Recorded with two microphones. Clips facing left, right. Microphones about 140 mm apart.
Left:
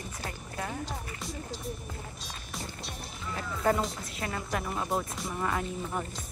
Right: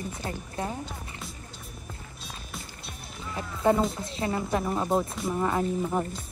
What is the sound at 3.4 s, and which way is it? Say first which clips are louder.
Speech: right 4 dB; 20° right (ahead or behind).